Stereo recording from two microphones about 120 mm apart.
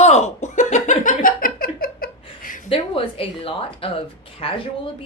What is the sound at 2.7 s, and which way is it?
Speech, 50° left (ahead or behind).